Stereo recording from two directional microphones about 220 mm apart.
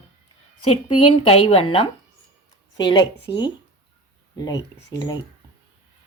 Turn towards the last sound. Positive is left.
turn(degrees=20)  # may be behind; listen again after turning